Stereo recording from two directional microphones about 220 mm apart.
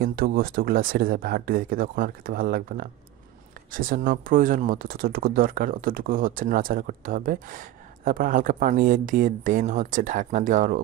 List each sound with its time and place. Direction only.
0.0 s speech: 40° right (ahead or behind)